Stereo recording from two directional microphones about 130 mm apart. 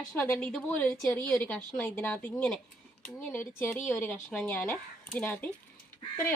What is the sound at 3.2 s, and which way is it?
A woman's voice, 15° left (ahead or behind).